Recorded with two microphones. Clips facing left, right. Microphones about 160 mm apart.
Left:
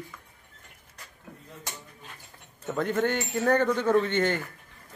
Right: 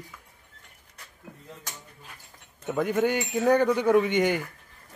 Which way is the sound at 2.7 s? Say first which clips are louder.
Right 2 dB; 10° right (ahead or behind).